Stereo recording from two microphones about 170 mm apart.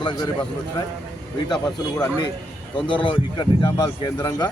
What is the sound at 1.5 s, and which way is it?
Speech, 25° left (ahead or behind).